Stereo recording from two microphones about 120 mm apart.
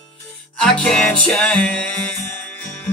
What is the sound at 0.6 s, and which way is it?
Music, 5° left (ahead or behind).